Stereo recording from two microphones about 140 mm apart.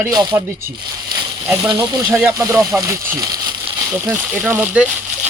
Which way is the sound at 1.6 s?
30° right (ahead or behind).